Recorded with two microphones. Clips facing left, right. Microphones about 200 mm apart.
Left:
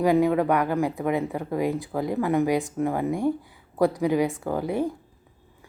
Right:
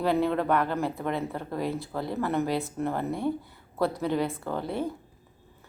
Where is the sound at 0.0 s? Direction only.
10° left (ahead or behind).